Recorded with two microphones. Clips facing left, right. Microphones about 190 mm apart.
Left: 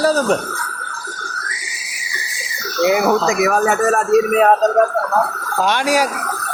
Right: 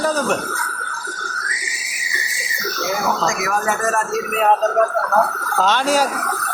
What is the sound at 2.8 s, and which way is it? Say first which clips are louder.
A man's voice: left 7 dB; 65° left (ahead or behind).